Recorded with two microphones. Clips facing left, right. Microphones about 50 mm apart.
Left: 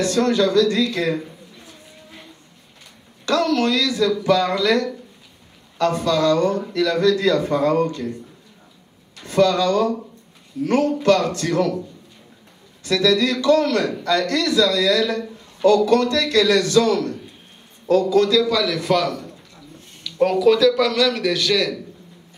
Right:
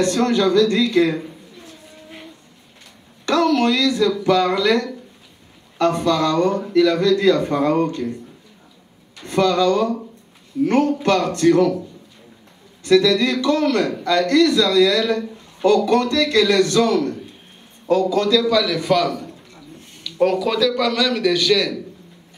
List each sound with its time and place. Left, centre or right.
0.0 s a man's voice: right
3.3 s a man's voice: right
9.2 s a man's voice: right
12.8 s a man's voice: right
18.3 s a man's voice: centre